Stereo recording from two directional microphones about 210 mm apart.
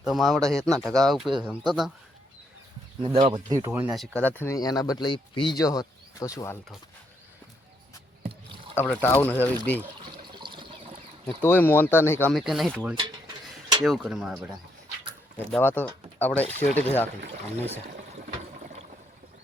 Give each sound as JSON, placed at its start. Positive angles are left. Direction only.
{"t": 0.0, "sound": "speech", "side_deg": 0}
{"t": 3.0, "sound": "speech", "side_deg": -30}
{"t": 3.5, "sound": "speech", "side_deg": -10}
{"t": 8.7, "sound": "speech", "side_deg": 10}
{"t": 10.3, "sound": "water", "side_deg": -20}
{"t": 11.3, "sound": "speech", "side_deg": 10}
{"t": 12.3, "sound": "speech", "side_deg": 0}
{"t": 15.5, "sound": "speech", "side_deg": 10}